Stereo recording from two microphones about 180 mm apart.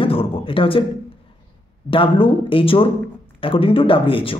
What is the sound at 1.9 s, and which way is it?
Speech, 30° left (ahead or behind).